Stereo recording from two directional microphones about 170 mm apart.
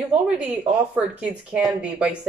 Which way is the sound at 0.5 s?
5° right (ahead or behind).